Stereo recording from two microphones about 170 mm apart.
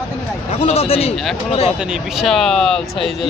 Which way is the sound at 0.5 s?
35° left (ahead or behind).